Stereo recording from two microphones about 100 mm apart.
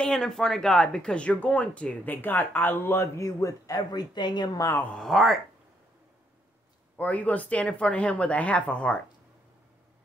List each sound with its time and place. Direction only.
0.0 s speech: 5° left (ahead or behind); by 4.5 s 50° left (ahead or behind)
4.6 s speech: 25° left (ahead or behind)
4.9 s speech: centre (ahead or behind)
7.0 s speech: 15° left (ahead or behind)